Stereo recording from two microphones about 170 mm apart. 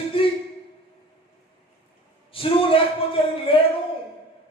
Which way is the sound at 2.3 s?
35° left (ahead or behind).